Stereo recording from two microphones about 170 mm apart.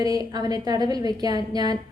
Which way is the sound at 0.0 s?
20° right (ahead or behind).